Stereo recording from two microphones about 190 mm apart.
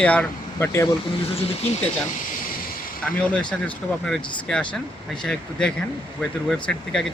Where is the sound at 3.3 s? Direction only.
5° left (ahead or behind).